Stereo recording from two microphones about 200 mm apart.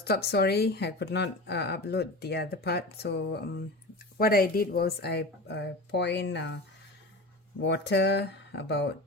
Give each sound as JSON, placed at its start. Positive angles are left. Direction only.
{"t": 0.0, "sound": "speech", "side_deg": 50}
{"t": 7.6, "sound": "speech", "side_deg": 60}